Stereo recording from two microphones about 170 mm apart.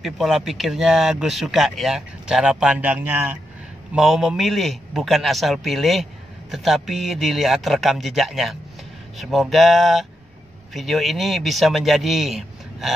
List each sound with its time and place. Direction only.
0.0 s speech: centre (ahead or behind)